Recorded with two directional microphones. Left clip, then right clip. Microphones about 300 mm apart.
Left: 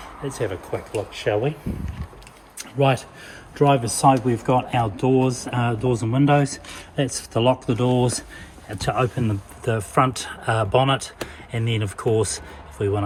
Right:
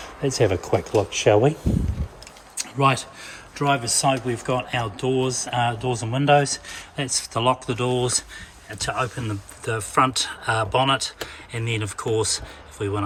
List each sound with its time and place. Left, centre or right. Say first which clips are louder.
0.3 s speech: right 7 dB; right
2.8 s speech: even; centre